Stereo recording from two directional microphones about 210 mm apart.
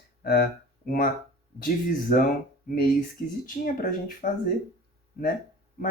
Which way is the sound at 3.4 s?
40° left (ahead or behind).